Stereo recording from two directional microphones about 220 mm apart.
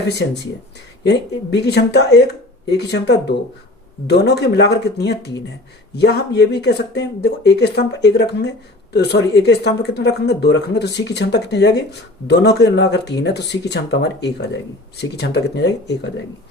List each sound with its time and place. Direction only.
1.0 s speech: 50° left (ahead or behind)